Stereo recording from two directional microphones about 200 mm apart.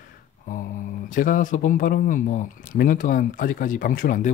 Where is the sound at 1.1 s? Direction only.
40° left (ahead or behind).